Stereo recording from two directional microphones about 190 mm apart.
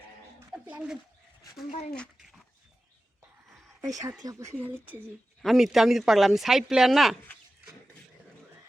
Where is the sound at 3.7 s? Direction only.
15° right (ahead or behind).